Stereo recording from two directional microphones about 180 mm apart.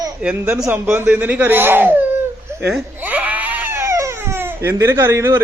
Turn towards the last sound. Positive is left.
turn(degrees=-15)  # may be behind; listen again after turning